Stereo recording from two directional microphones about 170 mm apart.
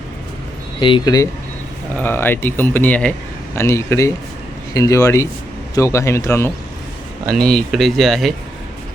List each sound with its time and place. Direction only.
0.8 s speech: 30° left (ahead or behind)
2.0 s speech: 10° left (ahead or behind)
7.3 s speech: 5° left (ahead or behind)